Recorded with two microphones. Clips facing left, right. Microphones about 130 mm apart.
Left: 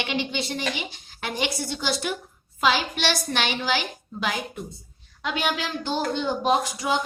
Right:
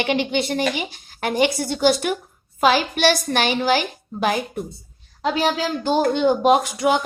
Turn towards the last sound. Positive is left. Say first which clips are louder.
# right 6 dB
turn(degrees=-65)  # may be behind; listen again after turning